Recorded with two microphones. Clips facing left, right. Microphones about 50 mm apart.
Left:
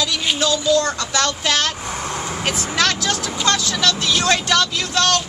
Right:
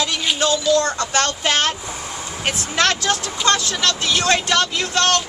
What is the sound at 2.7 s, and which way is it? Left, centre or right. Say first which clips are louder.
Speech: right 2 dB; right.